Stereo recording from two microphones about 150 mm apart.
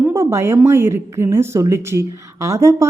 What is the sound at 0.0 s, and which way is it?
A woman's voice, 20° right (ahead or behind).